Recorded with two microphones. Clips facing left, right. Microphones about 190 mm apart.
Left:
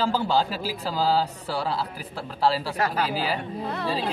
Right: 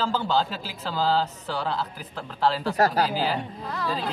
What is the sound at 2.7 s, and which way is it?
Speech, 40° right (ahead or behind).